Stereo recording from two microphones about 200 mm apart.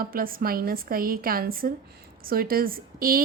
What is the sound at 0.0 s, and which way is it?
A woman's voice, 45° right (ahead or behind).